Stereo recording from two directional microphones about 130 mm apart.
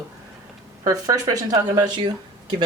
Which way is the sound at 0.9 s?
30° right (ahead or behind).